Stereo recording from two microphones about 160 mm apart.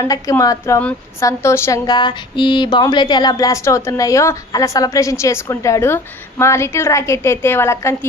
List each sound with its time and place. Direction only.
0.0 s speech: 20° left (ahead or behind)